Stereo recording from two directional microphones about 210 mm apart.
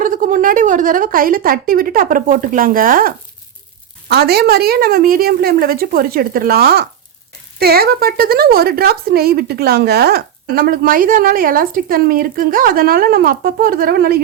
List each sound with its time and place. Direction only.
0.0 s a woman's voice: 40° right (ahead or behind)
4.1 s speech: 50° right (ahead or behind)